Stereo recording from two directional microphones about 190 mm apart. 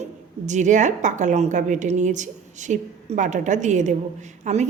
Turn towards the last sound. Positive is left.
turn(degrees=-40)  # may be behind; listen again after turning